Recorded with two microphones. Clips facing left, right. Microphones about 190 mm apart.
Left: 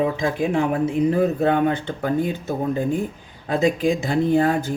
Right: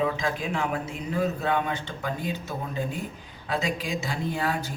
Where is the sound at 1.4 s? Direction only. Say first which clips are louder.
Left 8 dB; 55° left (ahead or behind).